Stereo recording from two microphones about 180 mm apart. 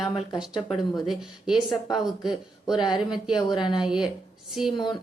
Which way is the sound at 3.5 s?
25° left (ahead or behind).